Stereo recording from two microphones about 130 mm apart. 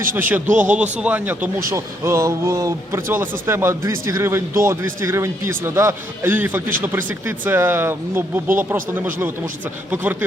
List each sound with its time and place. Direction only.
0.2 s speech: 15° right (ahead or behind)